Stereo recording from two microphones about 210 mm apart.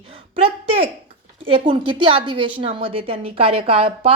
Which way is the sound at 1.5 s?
25° right (ahead or behind).